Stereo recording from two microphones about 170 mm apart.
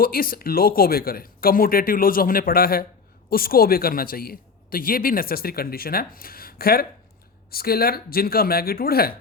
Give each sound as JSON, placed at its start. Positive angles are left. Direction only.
{"t": 0.0, "sound": "a man's voice", "side_deg": 60}